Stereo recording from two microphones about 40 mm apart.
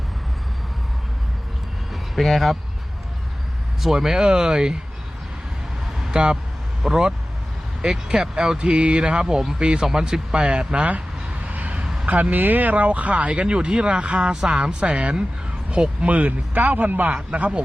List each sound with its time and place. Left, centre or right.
1.9 s vehicle: centre
3.8 s speech: centre
6.1 s speech: right
6.8 s speech: centre
7.8 s speech: centre
8.5 s speech: right
11.4 s a sound: right
12.0 s speech: right